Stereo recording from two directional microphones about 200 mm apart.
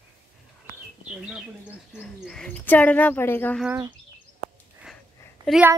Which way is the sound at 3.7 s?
15° right (ahead or behind).